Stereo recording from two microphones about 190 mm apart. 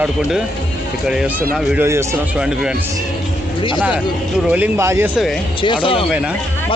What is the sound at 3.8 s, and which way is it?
Speech, 10° right (ahead or behind).